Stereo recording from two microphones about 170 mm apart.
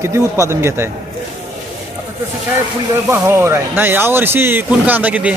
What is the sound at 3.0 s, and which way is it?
Speech, 15° right (ahead or behind).